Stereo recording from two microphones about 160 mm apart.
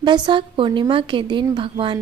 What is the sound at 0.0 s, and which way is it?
A woman's voice, 30° right (ahead or behind).